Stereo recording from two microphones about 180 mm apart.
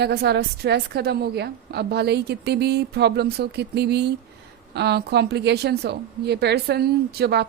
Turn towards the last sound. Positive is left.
turn(degrees=-65)  # may be behind; listen again after turning